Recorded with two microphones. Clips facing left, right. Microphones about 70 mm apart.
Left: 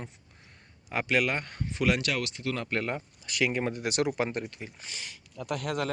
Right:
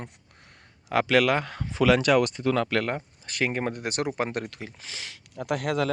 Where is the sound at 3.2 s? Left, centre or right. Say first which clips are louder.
Right 1 dB; right.